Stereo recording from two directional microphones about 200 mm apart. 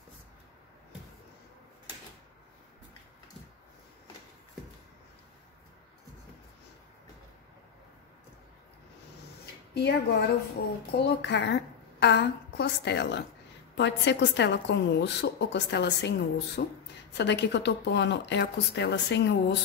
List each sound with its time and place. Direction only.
9.8 s a woman's voice: 55° left (ahead or behind)